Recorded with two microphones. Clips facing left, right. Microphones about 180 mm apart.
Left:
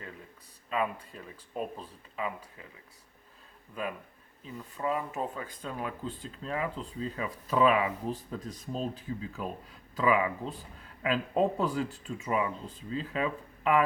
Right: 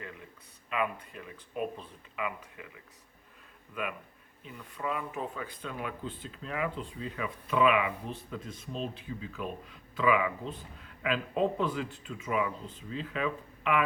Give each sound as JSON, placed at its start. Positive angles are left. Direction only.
{"t": 0.7, "sound": "speech", "side_deg": 35}
{"t": 4.4, "sound": "speech", "side_deg": 35}